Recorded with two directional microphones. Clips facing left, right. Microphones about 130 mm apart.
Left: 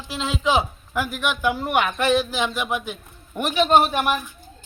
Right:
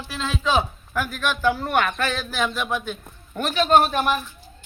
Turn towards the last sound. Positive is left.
turn(degrees=5)  # may be behind; listen again after turning